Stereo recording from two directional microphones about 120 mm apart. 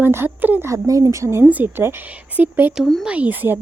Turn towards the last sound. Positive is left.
turn(degrees=-15)  # may be behind; listen again after turning